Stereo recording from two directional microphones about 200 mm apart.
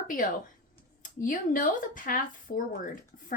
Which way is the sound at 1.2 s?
40° left (ahead or behind).